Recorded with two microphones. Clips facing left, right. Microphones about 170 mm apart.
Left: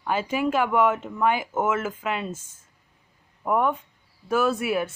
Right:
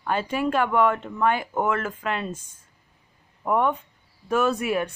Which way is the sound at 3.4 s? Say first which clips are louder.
Even; centre (ahead or behind).